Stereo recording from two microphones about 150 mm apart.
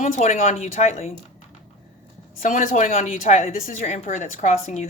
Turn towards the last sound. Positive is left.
turn(degrees=50)  # may be behind; listen again after turning